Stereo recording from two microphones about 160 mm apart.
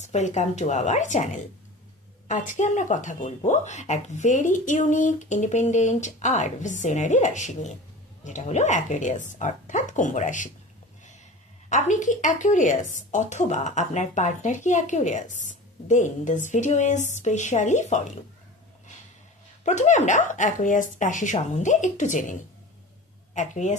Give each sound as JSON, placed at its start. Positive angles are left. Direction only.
{"t": 0.0, "sound": "a woman's voice", "side_deg": 45}
{"t": 11.7, "sound": "a woman's voice", "side_deg": 50}
{"t": 19.6, "sound": "a woman's voice", "side_deg": 45}